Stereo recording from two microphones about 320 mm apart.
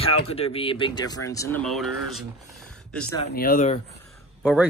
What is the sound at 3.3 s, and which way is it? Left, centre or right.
Speech, left.